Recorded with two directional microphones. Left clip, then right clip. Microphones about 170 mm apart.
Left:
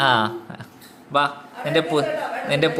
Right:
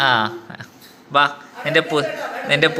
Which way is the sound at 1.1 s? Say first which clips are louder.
Right 4 dB; 5° left (ahead or behind).